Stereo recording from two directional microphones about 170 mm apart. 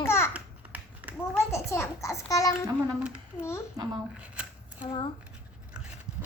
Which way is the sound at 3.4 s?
15° left (ahead or behind).